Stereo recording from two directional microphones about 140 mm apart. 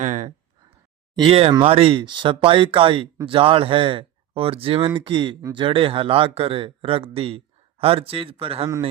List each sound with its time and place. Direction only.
0.0 s speech: 60° right (ahead or behind)
1.1 s speech: 35° right (ahead or behind)